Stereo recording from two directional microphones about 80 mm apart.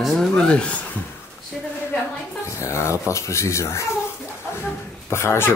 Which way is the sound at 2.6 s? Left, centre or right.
Left.